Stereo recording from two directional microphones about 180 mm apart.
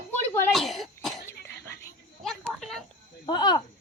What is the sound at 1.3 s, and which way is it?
Whispering, 15° left (ahead or behind).